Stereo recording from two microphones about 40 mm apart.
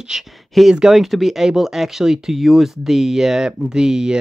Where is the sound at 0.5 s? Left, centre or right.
Centre.